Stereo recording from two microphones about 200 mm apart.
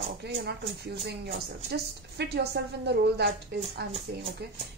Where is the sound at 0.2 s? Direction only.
55° right (ahead or behind).